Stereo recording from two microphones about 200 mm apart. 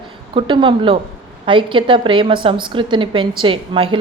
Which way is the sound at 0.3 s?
25° right (ahead or behind).